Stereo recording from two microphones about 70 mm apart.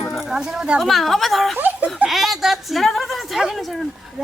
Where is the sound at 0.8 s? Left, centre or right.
Centre.